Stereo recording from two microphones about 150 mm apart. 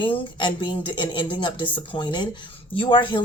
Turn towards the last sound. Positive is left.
turn(degrees=35)  # may be behind; listen again after turning